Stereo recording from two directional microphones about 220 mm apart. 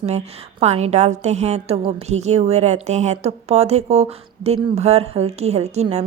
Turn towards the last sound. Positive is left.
turn(degrees=-30)  # may be behind; listen again after turning